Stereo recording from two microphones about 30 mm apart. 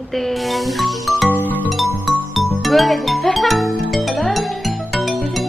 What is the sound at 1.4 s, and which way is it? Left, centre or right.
Music, left.